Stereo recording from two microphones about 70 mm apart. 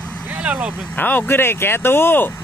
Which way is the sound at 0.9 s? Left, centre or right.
Left.